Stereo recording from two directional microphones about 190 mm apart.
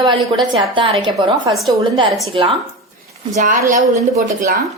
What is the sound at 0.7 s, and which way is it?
A woman's voice, 25° right (ahead or behind).